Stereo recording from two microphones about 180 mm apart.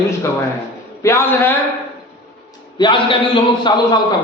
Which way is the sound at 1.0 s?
15° left (ahead or behind).